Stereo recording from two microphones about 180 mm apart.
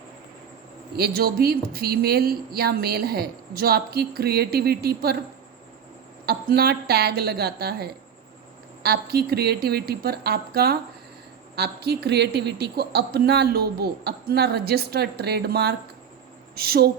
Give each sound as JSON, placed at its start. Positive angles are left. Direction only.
{"t": 0.9, "sound": "speech", "side_deg": -60}
{"t": 6.2, "sound": "speech", "side_deg": -60}